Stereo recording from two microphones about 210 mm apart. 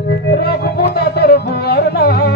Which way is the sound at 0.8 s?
50° left (ahead or behind).